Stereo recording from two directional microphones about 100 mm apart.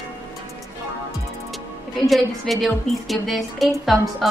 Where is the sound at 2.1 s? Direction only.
Centre (ahead or behind).